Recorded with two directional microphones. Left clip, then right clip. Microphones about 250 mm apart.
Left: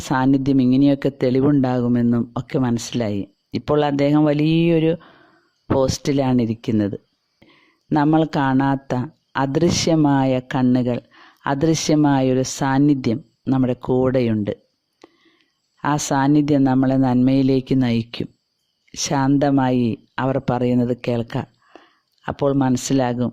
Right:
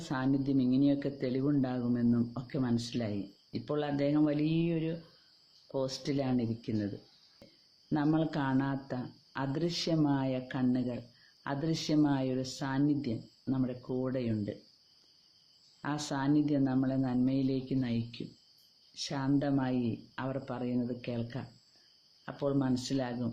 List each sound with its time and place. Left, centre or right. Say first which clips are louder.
0.1 s speech: left 14 dB; left
15.8 s speech: left 16 dB; left